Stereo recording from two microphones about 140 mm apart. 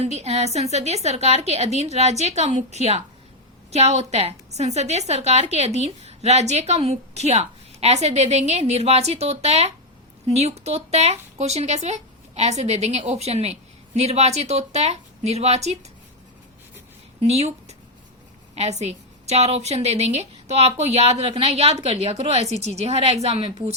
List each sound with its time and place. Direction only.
0.0 s a woman's voice: 50° right (ahead or behind)
17.2 s a woman's voice: 50° right (ahead or behind)